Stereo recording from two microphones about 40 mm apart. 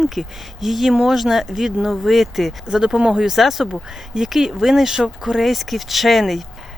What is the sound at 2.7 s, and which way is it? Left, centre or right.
Speech, centre.